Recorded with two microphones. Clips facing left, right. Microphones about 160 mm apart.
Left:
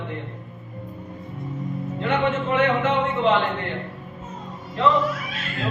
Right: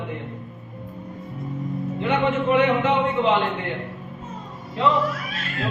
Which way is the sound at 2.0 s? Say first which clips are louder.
Right 1 dB; 15° right (ahead or behind).